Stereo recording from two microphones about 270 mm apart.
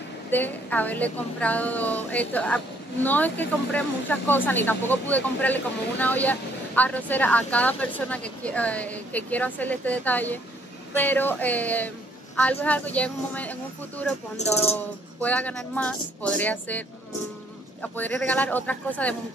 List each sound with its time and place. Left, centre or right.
0.3 s a woman's voice: centre
14.4 s speech: left
14.8 s a woman's voice: centre
17.9 s a woman's voice: centre